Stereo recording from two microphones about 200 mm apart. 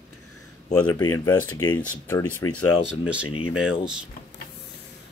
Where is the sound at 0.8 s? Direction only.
15° left (ahead or behind).